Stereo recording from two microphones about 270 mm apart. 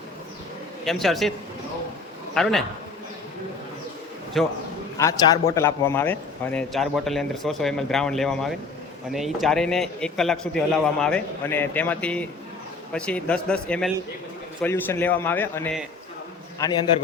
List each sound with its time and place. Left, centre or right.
0.9 s speech: centre
2.3 s speech: centre
4.4 s speech: centre
4.9 s a man's voice: centre
16.6 s a man's voice: centre